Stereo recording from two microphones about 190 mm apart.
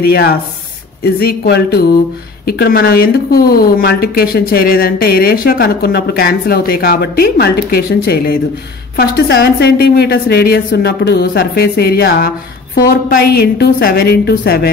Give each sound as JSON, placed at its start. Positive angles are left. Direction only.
{"t": 0.1, "sound": "a woman's voice", "side_deg": 55}